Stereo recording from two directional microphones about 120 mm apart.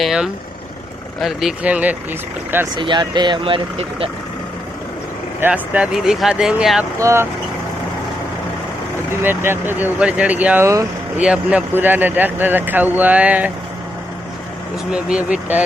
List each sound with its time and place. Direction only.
0.0 s speech: 5° right (ahead or behind)
2.7 s speech: 40° right (ahead or behind)
5.4 s speech: 10° right (ahead or behind)
7.0 s speech: 20° right (ahead or behind)
9.2 s speech: 20° right (ahead or behind)
14.8 s speech: 10° right (ahead or behind)